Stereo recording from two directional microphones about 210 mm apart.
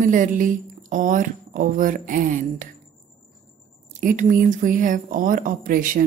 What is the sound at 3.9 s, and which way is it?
Speech, 35° right (ahead or behind).